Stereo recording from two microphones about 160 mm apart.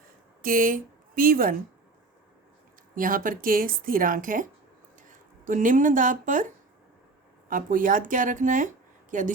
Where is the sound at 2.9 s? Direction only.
60° right (ahead or behind).